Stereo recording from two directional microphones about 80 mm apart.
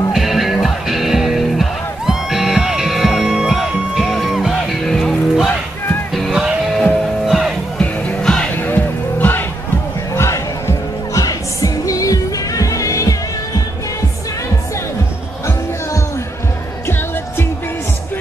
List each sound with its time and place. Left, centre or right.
0.1 s music: centre
7.8 s music: centre
8.5 s music: left
10.1 s music: left